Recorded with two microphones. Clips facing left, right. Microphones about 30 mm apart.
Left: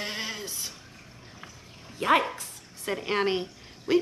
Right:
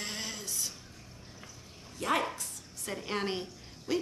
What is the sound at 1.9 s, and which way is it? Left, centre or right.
Speech, left.